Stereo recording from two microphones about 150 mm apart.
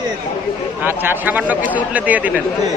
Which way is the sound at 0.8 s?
15° right (ahead or behind).